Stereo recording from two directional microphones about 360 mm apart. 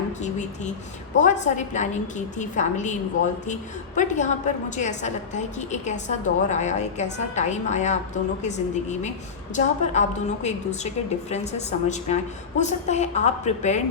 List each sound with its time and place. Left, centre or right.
0.2 s a woman's voice: centre